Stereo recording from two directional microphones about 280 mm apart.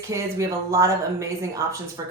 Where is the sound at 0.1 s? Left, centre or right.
Centre.